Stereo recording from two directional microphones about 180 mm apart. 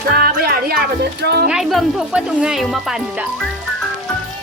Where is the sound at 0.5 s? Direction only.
60° right (ahead or behind).